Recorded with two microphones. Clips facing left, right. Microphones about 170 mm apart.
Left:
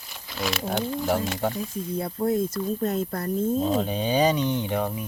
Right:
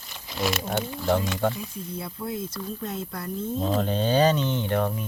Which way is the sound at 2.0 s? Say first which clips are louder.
Left 9 dB; 45° left (ahead or behind).